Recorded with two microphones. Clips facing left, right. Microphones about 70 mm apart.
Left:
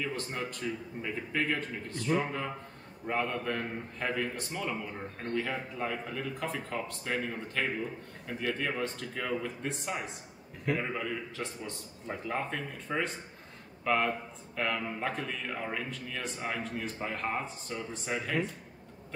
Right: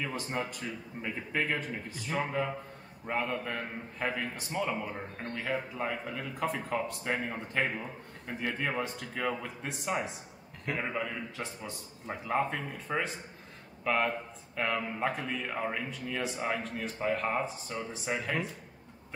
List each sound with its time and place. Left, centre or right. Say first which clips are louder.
0.0 s a man's voice: right 1 dB; centre
4.8 s a man's voice: even; centre
7.1 s a man's voice: right 1 dB; centre